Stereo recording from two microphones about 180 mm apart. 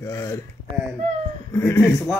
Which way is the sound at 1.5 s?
15° left (ahead or behind).